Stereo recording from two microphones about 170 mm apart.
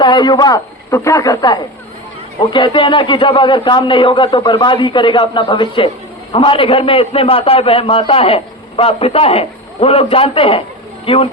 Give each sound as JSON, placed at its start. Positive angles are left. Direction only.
{"t": 0.0, "sound": "a man's voice", "side_deg": 25}